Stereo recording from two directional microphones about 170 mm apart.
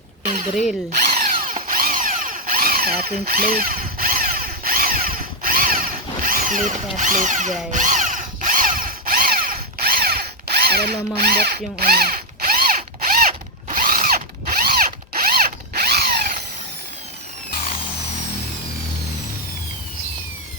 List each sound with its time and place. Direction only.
1.0 s tools: 60° right (ahead or behind)
7.7 s drill: 45° right (ahead or behind); by 16.4 s 65° right (ahead or behind)